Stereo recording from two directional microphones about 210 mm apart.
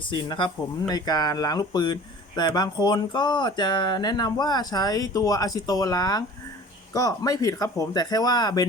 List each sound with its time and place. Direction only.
0.1 s speech: 20° left (ahead or behind)